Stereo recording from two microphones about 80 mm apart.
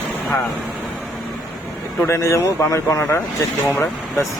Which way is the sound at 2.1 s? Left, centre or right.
Left.